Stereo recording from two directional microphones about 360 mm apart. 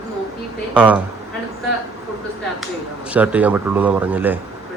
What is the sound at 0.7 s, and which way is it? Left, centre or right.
Speech, centre.